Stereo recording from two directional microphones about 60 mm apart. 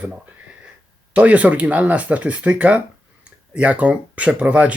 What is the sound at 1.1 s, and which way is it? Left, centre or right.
Speech, right.